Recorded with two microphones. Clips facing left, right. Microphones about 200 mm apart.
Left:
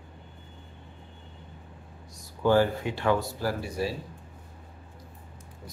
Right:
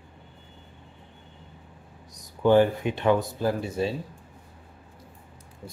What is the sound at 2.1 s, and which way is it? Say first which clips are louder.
Speech: right 3 dB; 20° right (ahead or behind).